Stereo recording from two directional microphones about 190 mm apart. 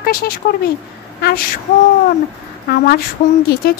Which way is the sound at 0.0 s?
50° left (ahead or behind).